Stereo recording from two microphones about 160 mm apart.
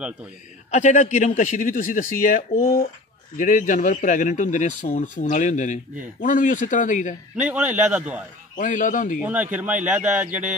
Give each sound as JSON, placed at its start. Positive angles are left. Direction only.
{"t": 0.7, "sound": "a man's voice", "side_deg": 50}
{"t": 7.3, "sound": "a man's voice", "side_deg": -10}
{"t": 8.5, "sound": "speech", "side_deg": 55}
{"t": 9.2, "sound": "a man's voice", "side_deg": -10}